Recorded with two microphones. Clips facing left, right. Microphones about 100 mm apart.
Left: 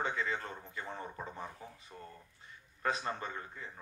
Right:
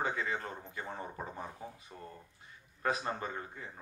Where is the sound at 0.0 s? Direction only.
35° right (ahead or behind).